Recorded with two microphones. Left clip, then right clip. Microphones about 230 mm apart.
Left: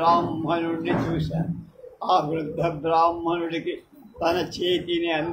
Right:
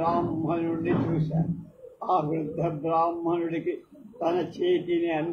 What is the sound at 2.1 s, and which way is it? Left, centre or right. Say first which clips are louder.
Speech: left 4 dB; left.